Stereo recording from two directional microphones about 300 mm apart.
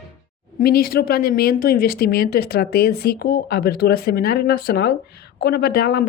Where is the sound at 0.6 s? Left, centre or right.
Left.